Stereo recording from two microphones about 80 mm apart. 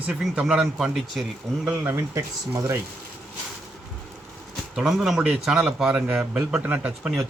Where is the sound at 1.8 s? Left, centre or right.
Right.